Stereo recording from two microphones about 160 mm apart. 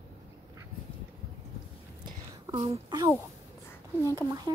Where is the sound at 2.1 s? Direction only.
25° right (ahead or behind).